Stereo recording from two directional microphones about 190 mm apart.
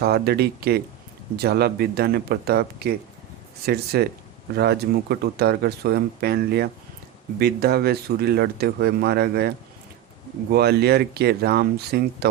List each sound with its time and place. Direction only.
0.0 s speech: 55° right (ahead or behind)
3.9 s speech: 55° right (ahead or behind)
10.5 s speech: 60° right (ahead or behind)